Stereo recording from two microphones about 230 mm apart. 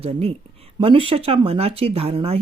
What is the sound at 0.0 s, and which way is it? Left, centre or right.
A woman's voice, right.